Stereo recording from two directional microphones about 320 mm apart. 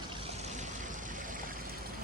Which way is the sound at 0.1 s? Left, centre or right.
Centre.